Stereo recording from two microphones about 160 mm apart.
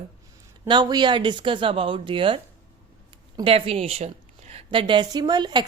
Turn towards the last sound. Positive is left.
turn(degrees=-25)  # may be behind; listen again after turning